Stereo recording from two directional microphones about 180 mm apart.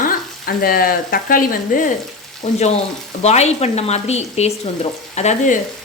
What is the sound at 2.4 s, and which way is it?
Speech, 40° left (ahead or behind).